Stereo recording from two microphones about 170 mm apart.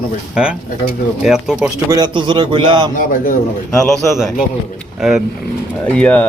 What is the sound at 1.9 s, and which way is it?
A man's voice, 25° right (ahead or behind).